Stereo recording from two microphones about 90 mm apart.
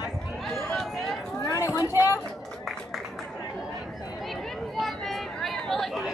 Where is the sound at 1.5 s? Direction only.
40° left (ahead or behind).